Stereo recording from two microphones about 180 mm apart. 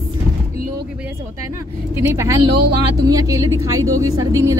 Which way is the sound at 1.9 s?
15° right (ahead or behind).